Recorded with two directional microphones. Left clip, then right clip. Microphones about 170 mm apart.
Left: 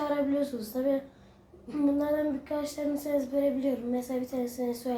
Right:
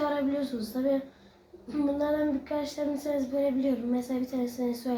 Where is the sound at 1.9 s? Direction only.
20° left (ahead or behind).